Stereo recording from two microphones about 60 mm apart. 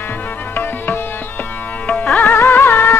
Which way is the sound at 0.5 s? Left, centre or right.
Left.